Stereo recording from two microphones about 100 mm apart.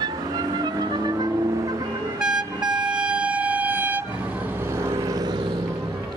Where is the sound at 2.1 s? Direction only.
5° right (ahead or behind).